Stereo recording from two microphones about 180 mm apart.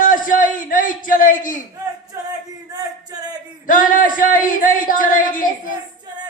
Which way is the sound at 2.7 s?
20° right (ahead or behind).